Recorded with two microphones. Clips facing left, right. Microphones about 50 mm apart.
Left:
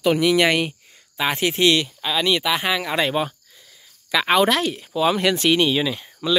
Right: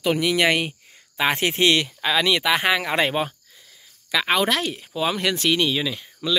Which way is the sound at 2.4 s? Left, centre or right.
Right.